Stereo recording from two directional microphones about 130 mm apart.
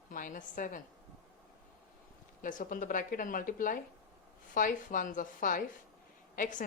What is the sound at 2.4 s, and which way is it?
A woman's voice, 90° left.